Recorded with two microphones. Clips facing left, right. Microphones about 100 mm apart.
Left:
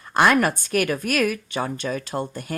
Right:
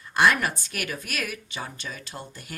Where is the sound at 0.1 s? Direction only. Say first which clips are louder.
Left 4 dB; 50° left (ahead or behind).